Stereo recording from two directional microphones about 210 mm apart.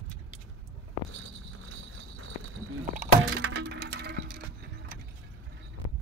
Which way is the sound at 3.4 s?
55° right (ahead or behind).